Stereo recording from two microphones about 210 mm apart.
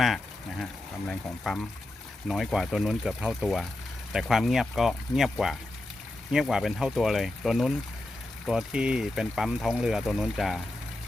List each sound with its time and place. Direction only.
0.6 s speech: centre (ahead or behind)